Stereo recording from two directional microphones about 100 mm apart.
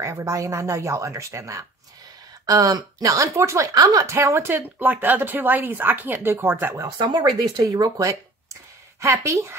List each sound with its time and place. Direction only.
0.0 s speech: 30° right (ahead or behind)
7.0 s speech: 40° right (ahead or behind)